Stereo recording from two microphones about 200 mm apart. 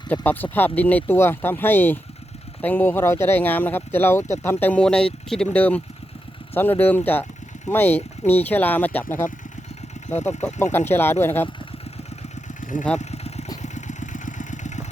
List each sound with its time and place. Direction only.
0.1 s speech: 10° left (ahead or behind)
10.1 s speech: 35° left (ahead or behind)
10.4 s speech: 10° left (ahead or behind)
13.0 s vehicle: 35° left (ahead or behind)